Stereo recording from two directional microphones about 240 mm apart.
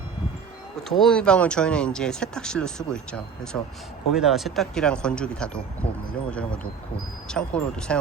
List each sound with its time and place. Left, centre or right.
0.9 s speech: centre